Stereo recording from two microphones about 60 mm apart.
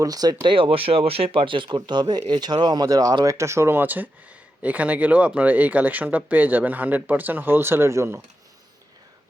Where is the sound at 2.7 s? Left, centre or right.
Right.